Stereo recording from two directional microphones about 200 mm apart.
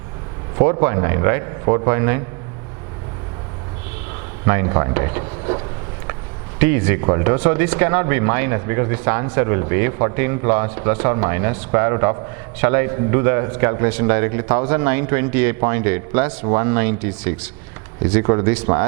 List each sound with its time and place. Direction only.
0.6 s speech: 20° right (ahead or behind)
4.4 s speech: 20° right (ahead or behind)